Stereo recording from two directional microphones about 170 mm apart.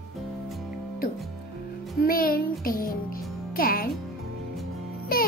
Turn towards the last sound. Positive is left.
turn(degrees=60)  # may be behind; listen again after turning